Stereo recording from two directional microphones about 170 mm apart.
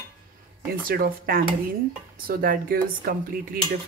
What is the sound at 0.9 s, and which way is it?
Speech, 60° right (ahead or behind).